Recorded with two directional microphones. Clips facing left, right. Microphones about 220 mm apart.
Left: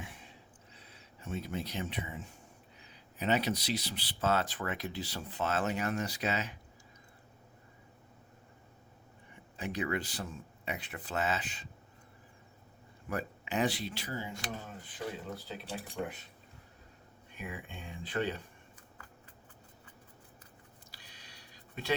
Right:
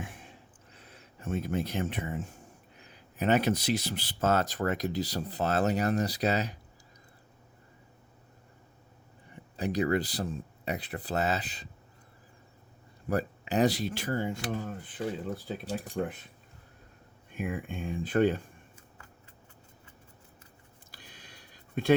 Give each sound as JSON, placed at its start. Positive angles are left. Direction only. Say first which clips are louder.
{"t": 0.0, "sound": "a sound", "louder": "right 5 dB", "side_deg": -50}
{"t": 2.7, "sound": "speech", "louder": "right 7 dB", "side_deg": -50}
{"t": 9.3, "sound": "speech", "louder": "right 7 dB", "side_deg": -35}
{"t": 13.1, "sound": "speech", "louder": "right 7 dB", "side_deg": -35}
{"t": 15.4, "sound": "speech", "louder": "right 7 dB", "side_deg": -45}
{"t": 17.3, "sound": "speech", "louder": "right 9 dB", "side_deg": -50}
{"t": 20.9, "sound": "a sound", "louder": "right 8 dB", "side_deg": -50}